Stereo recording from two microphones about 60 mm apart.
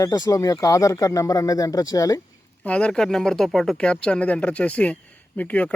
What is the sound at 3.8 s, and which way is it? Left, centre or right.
Speech, centre.